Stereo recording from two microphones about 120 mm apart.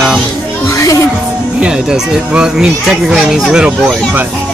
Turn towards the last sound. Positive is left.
turn(degrees=-10)  # may be behind; listen again after turning